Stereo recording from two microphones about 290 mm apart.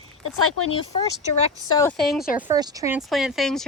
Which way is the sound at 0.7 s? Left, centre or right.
Centre.